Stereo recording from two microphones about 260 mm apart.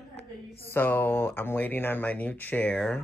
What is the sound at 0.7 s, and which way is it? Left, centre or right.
Speech, centre.